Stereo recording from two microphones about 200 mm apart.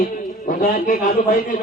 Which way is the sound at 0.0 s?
45° left (ahead or behind).